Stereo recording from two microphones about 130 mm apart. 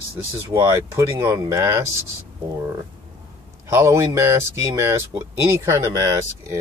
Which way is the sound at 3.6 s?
20° right (ahead or behind).